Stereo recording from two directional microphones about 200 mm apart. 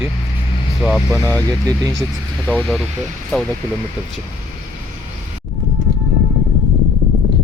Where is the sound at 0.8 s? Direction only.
10° right (ahead or behind).